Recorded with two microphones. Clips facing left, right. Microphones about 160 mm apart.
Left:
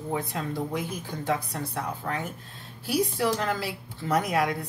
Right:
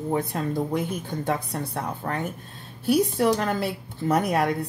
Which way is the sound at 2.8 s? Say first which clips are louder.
Right 5 dB; 55° right (ahead or behind).